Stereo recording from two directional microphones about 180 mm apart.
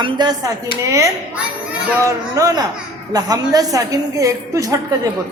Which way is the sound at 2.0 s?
20° right (ahead or behind).